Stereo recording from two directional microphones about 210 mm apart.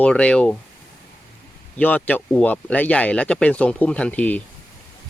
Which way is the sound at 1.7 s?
5° left (ahead or behind).